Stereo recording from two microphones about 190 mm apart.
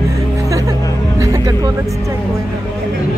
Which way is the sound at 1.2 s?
15° right (ahead or behind).